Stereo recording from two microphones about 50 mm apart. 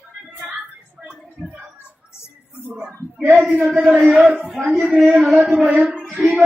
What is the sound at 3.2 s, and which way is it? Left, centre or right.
Speech, right.